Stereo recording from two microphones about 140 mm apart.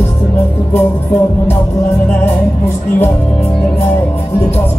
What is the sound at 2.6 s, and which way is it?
Music, 15° left (ahead or behind).